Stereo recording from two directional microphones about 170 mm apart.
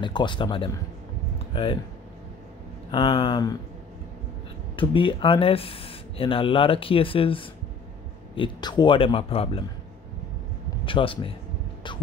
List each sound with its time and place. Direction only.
0.0 s speech: 30° left (ahead or behind)
2.9 s speech: 35° left (ahead or behind)
4.7 s speech: 30° left (ahead or behind)
10.9 s speech: 30° left (ahead or behind)